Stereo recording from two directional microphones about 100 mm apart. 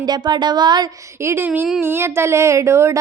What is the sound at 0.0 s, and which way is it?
Speech, 45° right (ahead or behind).